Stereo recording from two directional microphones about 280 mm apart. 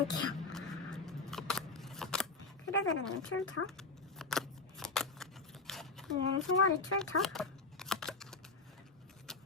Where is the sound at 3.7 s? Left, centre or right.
Centre.